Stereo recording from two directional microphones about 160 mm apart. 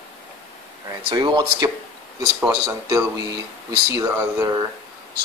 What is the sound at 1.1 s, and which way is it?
Speech, 25° right (ahead or behind).